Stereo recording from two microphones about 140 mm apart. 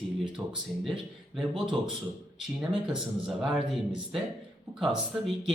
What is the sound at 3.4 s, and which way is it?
Speech, 5° right (ahead or behind).